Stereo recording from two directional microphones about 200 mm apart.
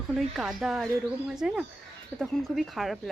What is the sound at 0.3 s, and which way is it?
Speech, centre (ahead or behind).